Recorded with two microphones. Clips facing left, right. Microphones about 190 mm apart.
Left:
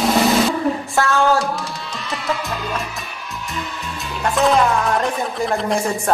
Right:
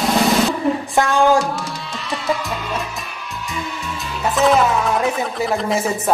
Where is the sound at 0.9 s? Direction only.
15° right (ahead or behind).